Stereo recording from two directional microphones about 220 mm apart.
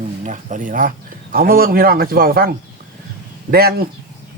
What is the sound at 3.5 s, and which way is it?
Speech, 45° right (ahead or behind).